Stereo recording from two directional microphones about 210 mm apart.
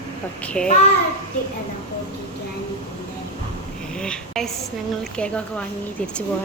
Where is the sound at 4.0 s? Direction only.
5° left (ahead or behind).